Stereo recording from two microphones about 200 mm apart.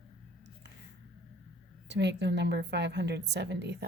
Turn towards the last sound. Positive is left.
turn(degrees=-60)  # may be behind; listen again after turning